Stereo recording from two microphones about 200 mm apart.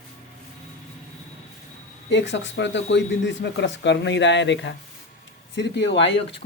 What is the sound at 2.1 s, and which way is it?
Speech, 65° left (ahead or behind).